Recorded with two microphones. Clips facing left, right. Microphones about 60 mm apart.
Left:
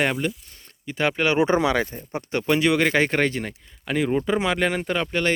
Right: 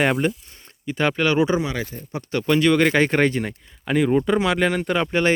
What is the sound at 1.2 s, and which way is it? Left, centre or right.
Speech, centre.